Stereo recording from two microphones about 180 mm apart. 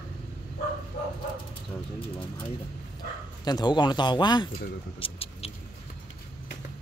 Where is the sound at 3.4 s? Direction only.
25° left (ahead or behind).